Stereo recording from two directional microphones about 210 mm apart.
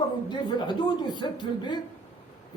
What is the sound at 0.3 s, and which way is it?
A man's voice, 20° left (ahead or behind).